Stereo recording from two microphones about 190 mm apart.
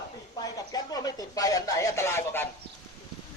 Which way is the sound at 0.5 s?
20° left (ahead or behind).